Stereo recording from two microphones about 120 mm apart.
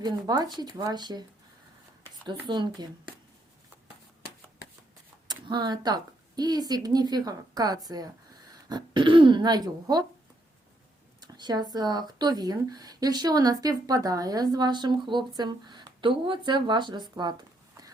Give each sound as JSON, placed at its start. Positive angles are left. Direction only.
{"t": 0.0, "sound": "speech", "side_deg": -35}
{"t": 2.2, "sound": "speech", "side_deg": -40}
{"t": 5.3, "sound": "speech", "side_deg": -35}
{"t": 11.2, "sound": "speech", "side_deg": -35}